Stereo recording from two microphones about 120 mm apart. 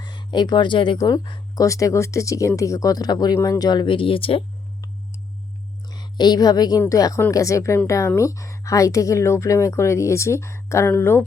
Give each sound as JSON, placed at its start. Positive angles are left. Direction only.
{"t": 0.0, "sound": "speech", "side_deg": 40}
{"t": 5.9, "sound": "a woman's voice", "side_deg": 35}